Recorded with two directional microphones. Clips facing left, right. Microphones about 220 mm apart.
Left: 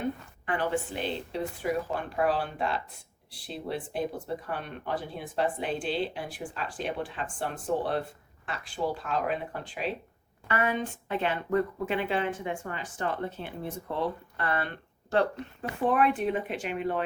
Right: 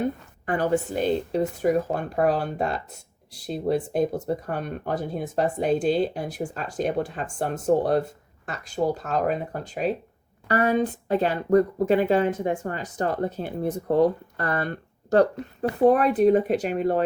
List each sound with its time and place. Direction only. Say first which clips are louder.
0.0 s speech: right 5 dB; 40° right (ahead or behind)